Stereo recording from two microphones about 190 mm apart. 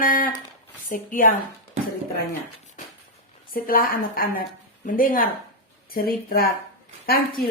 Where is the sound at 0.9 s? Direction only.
45° left (ahead or behind).